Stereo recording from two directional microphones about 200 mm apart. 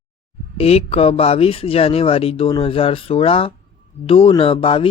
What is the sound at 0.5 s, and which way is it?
Speech, 30° left (ahead or behind).